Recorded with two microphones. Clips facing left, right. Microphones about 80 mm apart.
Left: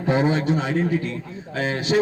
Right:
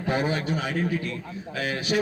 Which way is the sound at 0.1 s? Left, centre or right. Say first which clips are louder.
Left 6 dB; left.